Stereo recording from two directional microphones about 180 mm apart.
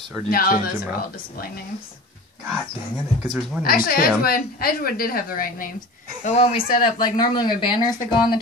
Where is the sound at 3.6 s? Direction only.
50° left (ahead or behind).